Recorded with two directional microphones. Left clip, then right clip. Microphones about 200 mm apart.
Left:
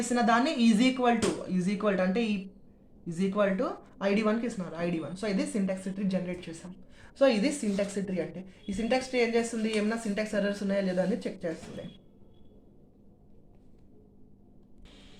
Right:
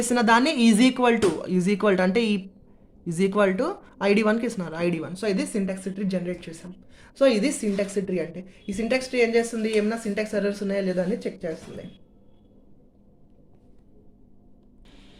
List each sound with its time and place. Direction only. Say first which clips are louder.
0.0 s speech: right 6 dB; 45° right (ahead or behind); by 11.9 s 20° right (ahead or behind)